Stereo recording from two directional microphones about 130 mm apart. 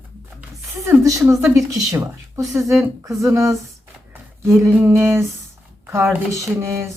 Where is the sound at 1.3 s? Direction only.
25° right (ahead or behind).